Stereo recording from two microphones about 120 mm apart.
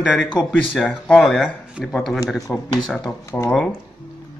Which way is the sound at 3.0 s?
25° left (ahead or behind).